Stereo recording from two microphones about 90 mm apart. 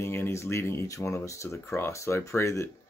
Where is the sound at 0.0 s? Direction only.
25° left (ahead or behind).